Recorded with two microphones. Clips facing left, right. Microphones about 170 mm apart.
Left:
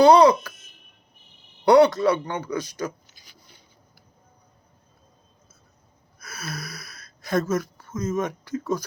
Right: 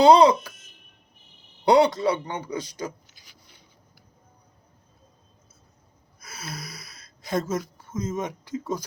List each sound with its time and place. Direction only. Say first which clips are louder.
0.0 s speech: left 1 dB; 25° right (ahead or behind)
1.6 s speech: left 3 dB; 25° right (ahead or behind)
3.1 s a sound: left 2 dB; 35° left (ahead or behind)
6.1 s gasp: left 3 dB; 25° right (ahead or behind)
7.4 s speech: left 3 dB; 25° right (ahead or behind)